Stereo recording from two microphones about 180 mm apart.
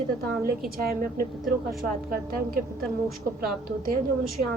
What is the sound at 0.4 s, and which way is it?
A woman's voice, 55° right (ahead or behind).